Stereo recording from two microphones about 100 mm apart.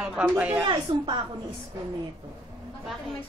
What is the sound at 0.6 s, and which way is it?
Speech, 55° right (ahead or behind).